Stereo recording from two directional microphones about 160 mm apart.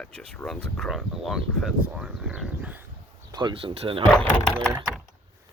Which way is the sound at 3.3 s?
30° right (ahead or behind).